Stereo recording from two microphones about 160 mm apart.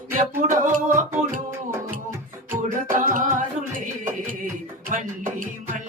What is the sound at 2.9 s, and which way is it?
Music, 55° right (ahead or behind).